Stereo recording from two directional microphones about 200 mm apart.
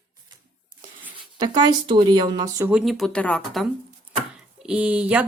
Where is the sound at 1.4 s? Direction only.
20° right (ahead or behind).